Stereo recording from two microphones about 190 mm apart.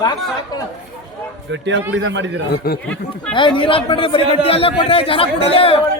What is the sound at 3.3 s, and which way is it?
A man's voice, 25° left (ahead or behind).